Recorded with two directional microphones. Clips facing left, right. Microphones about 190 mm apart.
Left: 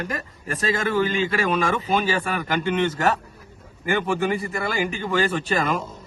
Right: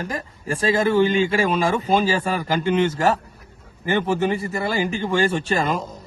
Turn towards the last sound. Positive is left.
turn(degrees=-35)  # may be behind; listen again after turning